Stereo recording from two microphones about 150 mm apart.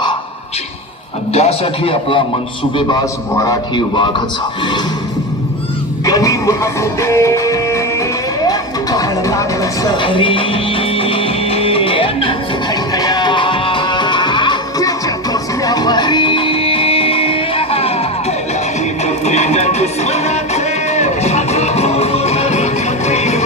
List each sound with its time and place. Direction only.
1.3 s a man's voice: 45° left (ahead or behind)
3.3 s a man's voice: 25° left (ahead or behind)
6.1 s music: 25° left (ahead or behind); by 23.4 s 45° left (ahead or behind)